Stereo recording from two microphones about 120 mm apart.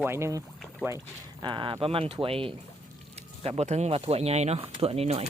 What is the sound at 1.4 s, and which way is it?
Speech, 40° right (ahead or behind).